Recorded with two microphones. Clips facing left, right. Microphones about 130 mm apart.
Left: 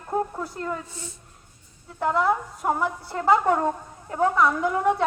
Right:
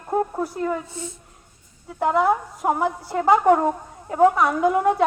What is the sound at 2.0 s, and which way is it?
A woman's voice, 20° right (ahead or behind).